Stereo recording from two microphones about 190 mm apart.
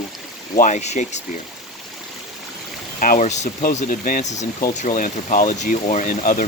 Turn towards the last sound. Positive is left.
turn(degrees=45)  # may be behind; listen again after turning